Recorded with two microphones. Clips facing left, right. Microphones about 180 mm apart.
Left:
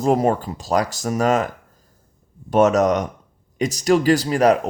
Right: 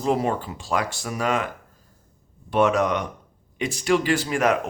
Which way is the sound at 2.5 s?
40° left (ahead or behind).